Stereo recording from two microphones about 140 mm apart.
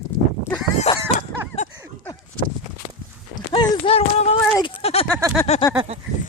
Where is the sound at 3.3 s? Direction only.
30° left (ahead or behind).